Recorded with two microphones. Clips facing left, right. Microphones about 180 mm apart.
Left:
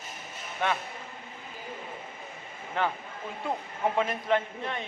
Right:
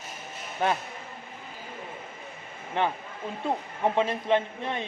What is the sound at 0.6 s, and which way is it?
Speech, 40° right (ahead or behind).